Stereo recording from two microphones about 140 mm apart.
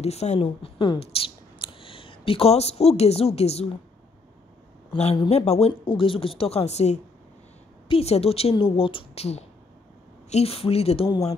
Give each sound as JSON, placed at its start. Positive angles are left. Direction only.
{"t": 0.0, "sound": "speech", "side_deg": 50}
{"t": 4.9, "sound": "speech", "side_deg": 50}